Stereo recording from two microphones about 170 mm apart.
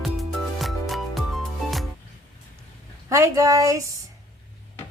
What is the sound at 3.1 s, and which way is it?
Speech, 20° right (ahead or behind).